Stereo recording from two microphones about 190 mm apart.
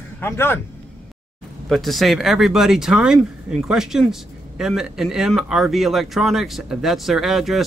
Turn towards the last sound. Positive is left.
turn(degrees=0)  # may be behind; listen again after turning